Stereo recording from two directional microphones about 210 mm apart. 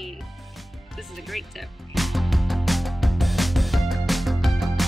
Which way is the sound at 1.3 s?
Centre (ahead or behind).